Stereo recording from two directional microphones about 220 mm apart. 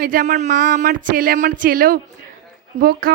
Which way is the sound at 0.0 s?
40° right (ahead or behind).